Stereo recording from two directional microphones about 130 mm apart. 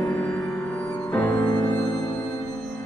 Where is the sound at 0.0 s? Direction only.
15° left (ahead or behind).